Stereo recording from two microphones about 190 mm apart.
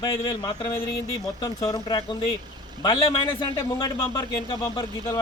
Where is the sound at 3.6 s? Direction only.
15° left (ahead or behind).